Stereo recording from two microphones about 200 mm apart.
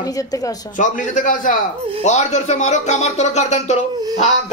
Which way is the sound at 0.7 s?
40° left (ahead or behind).